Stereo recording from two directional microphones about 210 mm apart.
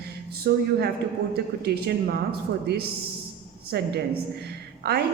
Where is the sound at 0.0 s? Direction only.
50° right (ahead or behind).